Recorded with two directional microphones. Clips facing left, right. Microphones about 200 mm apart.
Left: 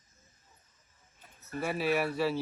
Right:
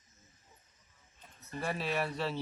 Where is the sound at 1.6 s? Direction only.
5° left (ahead or behind).